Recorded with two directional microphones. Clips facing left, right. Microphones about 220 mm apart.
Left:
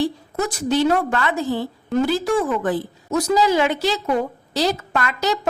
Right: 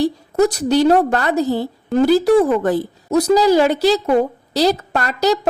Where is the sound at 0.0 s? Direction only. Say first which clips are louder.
Right 7 dB; 40° right (ahead or behind).